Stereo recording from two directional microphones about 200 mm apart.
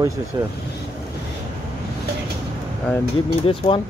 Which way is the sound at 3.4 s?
25° left (ahead or behind).